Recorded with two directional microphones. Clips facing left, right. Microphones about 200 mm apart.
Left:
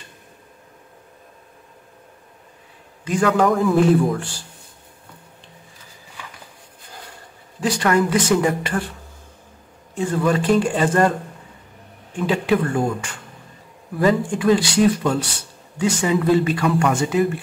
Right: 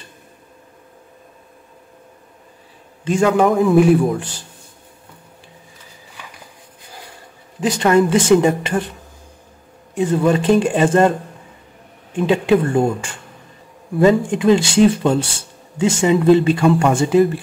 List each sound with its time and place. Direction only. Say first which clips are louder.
3.1 s speech: right 3 dB; 25° right (ahead or behind)
7.6 s speech: right 4 dB; 20° right (ahead or behind)
9.9 s speech: right 4 dB; 25° right (ahead or behind)